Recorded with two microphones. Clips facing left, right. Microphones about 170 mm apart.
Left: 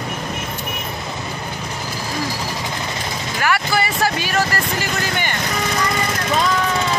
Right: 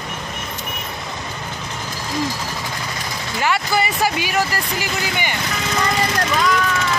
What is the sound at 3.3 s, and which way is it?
Speech, 20° right (ahead or behind).